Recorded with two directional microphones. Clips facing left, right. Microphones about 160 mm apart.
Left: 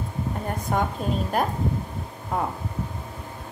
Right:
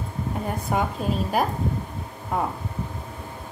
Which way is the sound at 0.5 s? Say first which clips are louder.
Even; 5° right (ahead or behind).